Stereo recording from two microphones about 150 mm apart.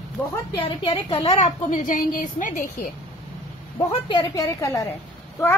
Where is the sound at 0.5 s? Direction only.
35° left (ahead or behind); by 2.9 s 65° left (ahead or behind).